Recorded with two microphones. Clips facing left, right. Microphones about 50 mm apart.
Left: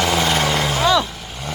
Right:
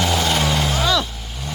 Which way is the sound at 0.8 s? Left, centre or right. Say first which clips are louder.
Left 5 dB; centre.